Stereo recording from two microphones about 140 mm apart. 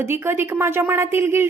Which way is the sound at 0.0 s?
15° right (ahead or behind).